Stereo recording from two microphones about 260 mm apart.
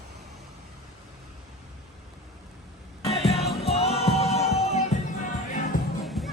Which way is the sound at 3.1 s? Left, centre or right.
Left.